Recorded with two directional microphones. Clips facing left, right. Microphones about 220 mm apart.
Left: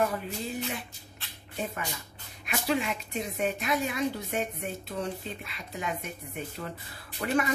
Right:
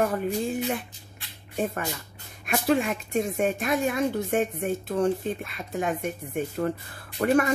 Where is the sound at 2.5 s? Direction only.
45° right (ahead or behind).